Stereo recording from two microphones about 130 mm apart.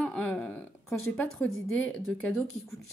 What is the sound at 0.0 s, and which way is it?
A woman's voice, 10° left (ahead or behind).